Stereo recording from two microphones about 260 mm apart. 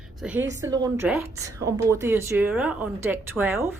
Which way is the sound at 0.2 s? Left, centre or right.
Centre.